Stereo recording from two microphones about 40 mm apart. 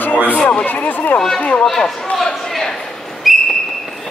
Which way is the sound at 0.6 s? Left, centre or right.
Left.